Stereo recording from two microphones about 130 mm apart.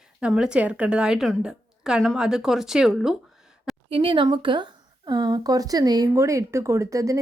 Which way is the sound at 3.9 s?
45° right (ahead or behind).